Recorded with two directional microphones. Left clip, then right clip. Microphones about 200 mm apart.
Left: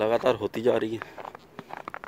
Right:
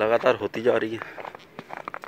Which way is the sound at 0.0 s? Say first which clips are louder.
Right 3 dB; 30° left (ahead or behind).